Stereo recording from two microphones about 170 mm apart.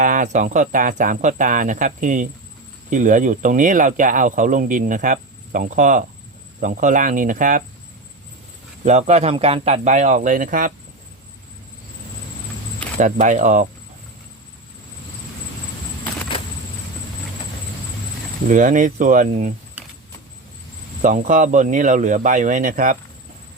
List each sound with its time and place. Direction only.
0.0 s speech: 50° right (ahead or behind)
8.8 s speech: 45° right (ahead or behind)
13.0 s speech: 45° right (ahead or behind)
18.4 s speech: 50° right (ahead or behind)
21.0 s speech: 50° right (ahead or behind)